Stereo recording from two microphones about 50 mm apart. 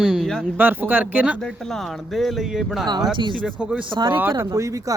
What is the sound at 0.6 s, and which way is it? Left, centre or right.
Speech, right.